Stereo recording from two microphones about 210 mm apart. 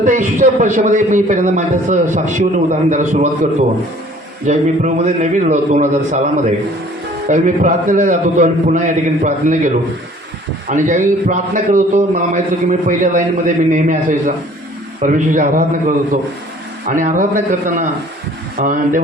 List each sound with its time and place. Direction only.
0.0 s a man's voice: 35° right (ahead or behind)
7.3 s a man's voice: 40° right (ahead or behind)
16.8 s a man's voice: 35° right (ahead or behind)